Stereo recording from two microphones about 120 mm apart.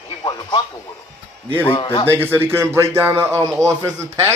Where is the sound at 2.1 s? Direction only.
20° right (ahead or behind).